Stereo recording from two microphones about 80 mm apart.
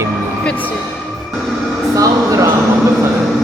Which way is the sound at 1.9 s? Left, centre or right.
Right.